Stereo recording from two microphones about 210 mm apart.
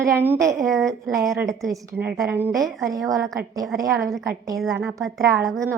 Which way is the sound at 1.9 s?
5° right (ahead or behind).